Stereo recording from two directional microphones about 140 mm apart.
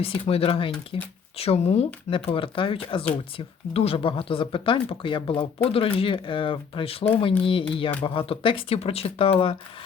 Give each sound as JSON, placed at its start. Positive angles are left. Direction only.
{"t": 0.0, "sound": "speech", "side_deg": 45}